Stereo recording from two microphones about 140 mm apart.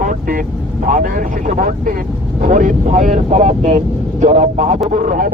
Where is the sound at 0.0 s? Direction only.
70° right (ahead or behind); by 4.8 s 55° right (ahead or behind).